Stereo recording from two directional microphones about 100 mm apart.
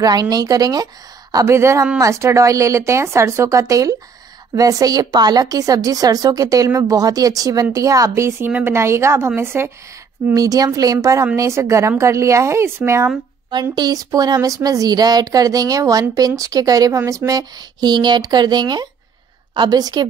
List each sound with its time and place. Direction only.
0.0 s a woman's voice: 40° right (ahead or behind); by 9.7 s 25° right (ahead or behind)
10.3 s a woman's voice: 35° right (ahead or behind)
13.5 s a woman's voice: 45° right (ahead or behind)